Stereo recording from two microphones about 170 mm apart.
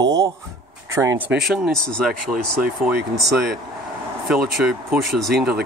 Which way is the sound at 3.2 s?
70° right (ahead or behind).